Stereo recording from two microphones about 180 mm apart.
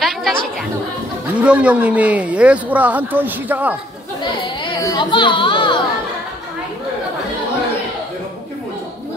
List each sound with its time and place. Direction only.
0.0 s chatter: centre (ahead or behind)
1.3 s speech: 5° right (ahead or behind)
4.2 s speech: 25° left (ahead or behind)